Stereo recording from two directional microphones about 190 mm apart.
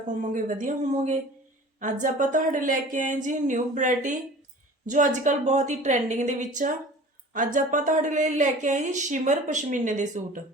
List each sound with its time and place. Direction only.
0.1 s speech: 40° right (ahead or behind)